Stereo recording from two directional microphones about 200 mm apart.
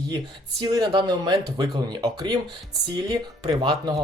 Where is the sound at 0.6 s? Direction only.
20° right (ahead or behind).